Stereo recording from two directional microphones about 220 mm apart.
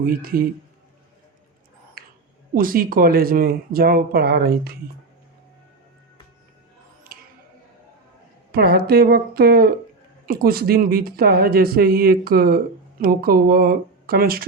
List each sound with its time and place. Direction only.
0.0 s speech: 40° right (ahead or behind)
2.0 s a sound: 40° right (ahead or behind)
2.6 s speech: 40° right (ahead or behind)
7.1 s music: 40° right (ahead or behind)
8.5 s speech: 45° right (ahead or behind)